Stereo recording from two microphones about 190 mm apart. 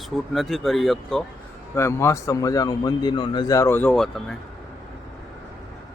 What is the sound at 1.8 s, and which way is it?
A man's voice, 15° left (ahead or behind).